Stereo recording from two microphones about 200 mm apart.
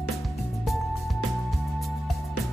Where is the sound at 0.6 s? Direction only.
Centre (ahead or behind).